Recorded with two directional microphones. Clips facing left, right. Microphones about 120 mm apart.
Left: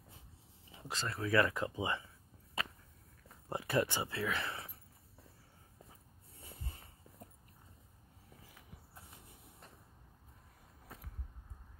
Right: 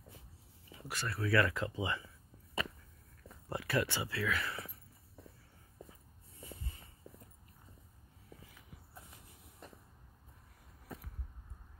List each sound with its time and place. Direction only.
0.7 s speech: 20° left (ahead or behind)
3.4 s speech: 20° left (ahead or behind)